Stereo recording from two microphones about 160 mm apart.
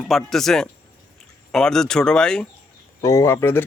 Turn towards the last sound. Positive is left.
turn(degrees=15)  # may be behind; listen again after turning